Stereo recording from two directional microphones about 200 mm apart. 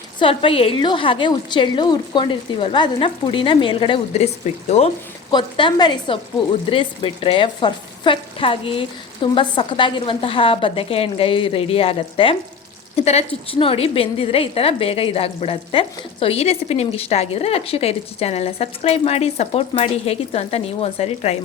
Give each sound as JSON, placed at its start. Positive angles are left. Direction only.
{"t": 0.2, "sound": "a woman's voice", "side_deg": 25}